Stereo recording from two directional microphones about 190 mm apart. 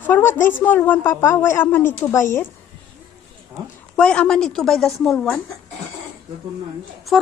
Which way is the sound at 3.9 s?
5° left (ahead or behind).